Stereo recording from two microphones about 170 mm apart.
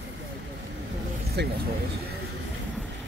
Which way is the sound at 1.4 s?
85° right.